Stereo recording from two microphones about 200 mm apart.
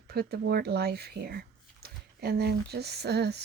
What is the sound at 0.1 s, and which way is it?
Speech, 50° right (ahead or behind).